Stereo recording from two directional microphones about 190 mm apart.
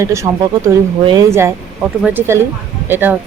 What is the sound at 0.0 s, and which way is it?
Speech, 15° right (ahead or behind).